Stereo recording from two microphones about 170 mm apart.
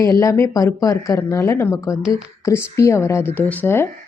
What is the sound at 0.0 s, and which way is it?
A woman's voice, 20° left (ahead or behind).